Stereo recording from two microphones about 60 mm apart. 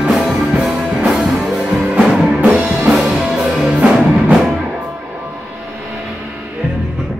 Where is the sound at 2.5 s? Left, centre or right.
Centre.